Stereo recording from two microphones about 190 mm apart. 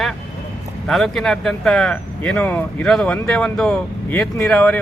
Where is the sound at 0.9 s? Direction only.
Centre (ahead or behind).